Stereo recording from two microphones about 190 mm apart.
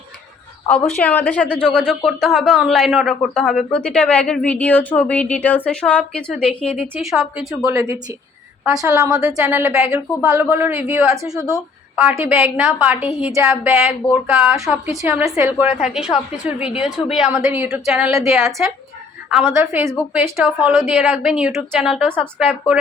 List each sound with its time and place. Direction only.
0.7 s a woman's voice: 5° left (ahead or behind)
6.8 s a woman's voice: 5° right (ahead or behind)
8.7 s a woman's voice: 15° right (ahead or behind)
9.4 s a woman's voice: 5° right (ahead or behind)
18.2 s a woman's voice: 15° right (ahead or behind)